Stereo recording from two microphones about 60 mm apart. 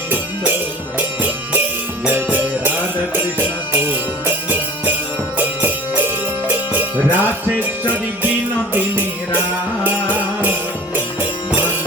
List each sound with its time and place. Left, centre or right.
0.1 s music: right
8.7 s music: right